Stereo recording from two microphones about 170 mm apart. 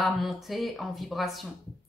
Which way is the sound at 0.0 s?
Centre (ahead or behind).